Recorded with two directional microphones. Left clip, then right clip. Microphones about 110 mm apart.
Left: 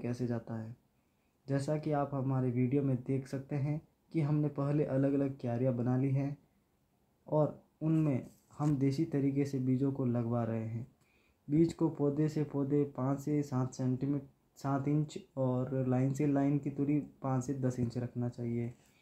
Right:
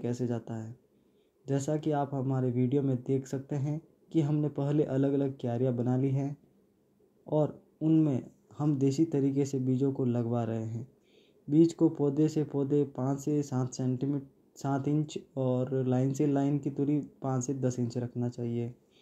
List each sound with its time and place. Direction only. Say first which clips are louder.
0.0 s speech: right 4 dB; 25° right (ahead or behind)
1.7 s speech: right 3 dB; 25° right (ahead or behind)
7.3 s speech: right 2 dB; 25° right (ahead or behind)